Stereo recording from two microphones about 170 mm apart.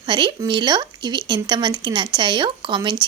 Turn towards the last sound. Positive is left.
turn(degrees=-25)  # may be behind; listen again after turning